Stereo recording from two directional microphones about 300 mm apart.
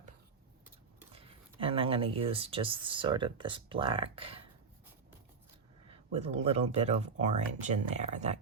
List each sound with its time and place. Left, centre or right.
1.1 s speech: centre
5.9 s speech: right